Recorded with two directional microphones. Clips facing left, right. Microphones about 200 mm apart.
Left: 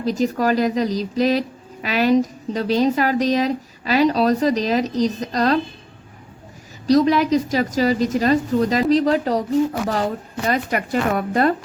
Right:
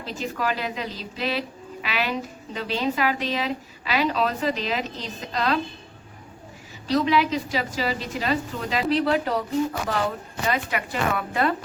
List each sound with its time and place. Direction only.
0.0 s speech: 40° left (ahead or behind)
6.8 s a woman's voice: 40° left (ahead or behind)
10.5 s a woman's voice: 45° left (ahead or behind)